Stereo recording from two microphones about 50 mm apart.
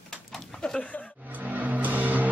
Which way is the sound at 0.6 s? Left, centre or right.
Left.